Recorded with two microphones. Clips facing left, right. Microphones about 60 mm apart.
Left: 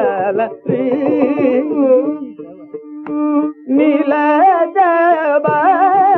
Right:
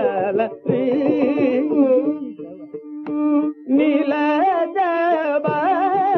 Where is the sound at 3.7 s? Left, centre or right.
Left.